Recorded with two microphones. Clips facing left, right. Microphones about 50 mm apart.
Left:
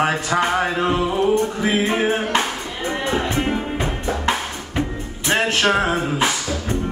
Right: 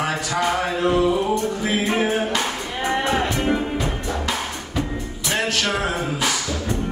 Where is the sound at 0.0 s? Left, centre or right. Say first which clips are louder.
Left 3 dB; left.